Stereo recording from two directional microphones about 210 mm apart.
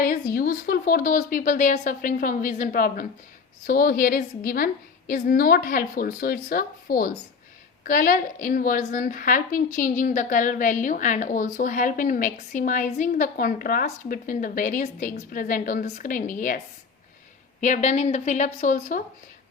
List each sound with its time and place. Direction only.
0.3 s a woman's voice: 45° left (ahead or behind)
17.6 s a woman's voice: 35° left (ahead or behind)